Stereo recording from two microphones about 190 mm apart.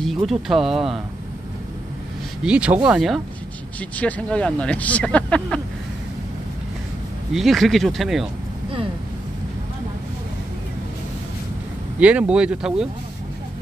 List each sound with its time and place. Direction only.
0.3 s speech: centre (ahead or behind)
2.4 s speech: 5° right (ahead or behind)
7.3 s speech: centre (ahead or behind)
12.0 s speech: 5° right (ahead or behind)